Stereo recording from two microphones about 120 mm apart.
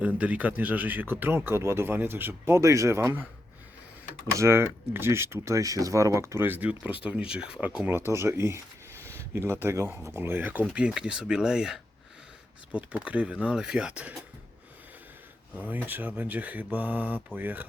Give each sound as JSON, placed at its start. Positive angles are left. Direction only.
{"t": 0.2, "sound": "speech", "side_deg": -10}
{"t": 4.3, "sound": "speech", "side_deg": -25}
{"t": 7.9, "sound": "speech", "side_deg": -20}
{"t": 15.5, "sound": "speech", "side_deg": -15}